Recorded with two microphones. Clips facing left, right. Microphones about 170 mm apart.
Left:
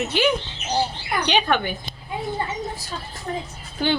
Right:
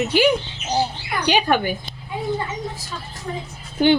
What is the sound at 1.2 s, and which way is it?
Speech, 10° right (ahead or behind).